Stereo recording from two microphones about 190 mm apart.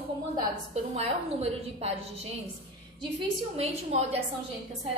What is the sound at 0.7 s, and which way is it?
A woman's voice, 35° right (ahead or behind).